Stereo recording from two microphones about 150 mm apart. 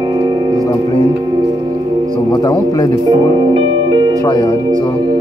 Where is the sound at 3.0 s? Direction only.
30° right (ahead or behind).